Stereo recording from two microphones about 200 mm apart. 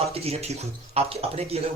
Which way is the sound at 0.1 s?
30° right (ahead or behind).